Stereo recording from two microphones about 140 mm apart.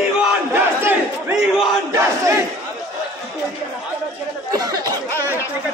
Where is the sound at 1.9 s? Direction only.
20° right (ahead or behind).